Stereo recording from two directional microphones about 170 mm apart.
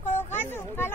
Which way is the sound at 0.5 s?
15° left (ahead or behind).